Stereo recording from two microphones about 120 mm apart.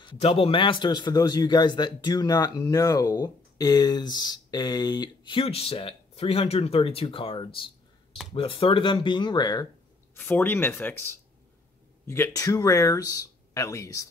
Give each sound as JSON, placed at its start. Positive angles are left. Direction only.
{"t": 0.2, "sound": "a man's voice", "side_deg": 55}
{"t": 10.1, "sound": "speech", "side_deg": 15}